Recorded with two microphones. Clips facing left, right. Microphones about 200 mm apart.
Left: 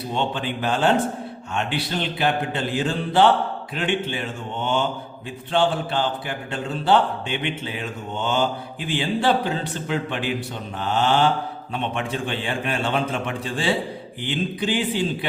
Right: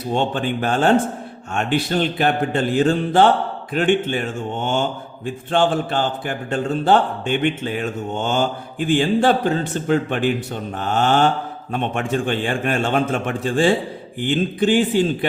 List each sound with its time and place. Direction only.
0.1 s speech: 50° right (ahead or behind)